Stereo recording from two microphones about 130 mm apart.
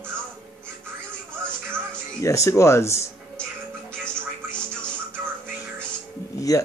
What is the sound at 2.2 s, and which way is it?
Speech, 25° left (ahead or behind).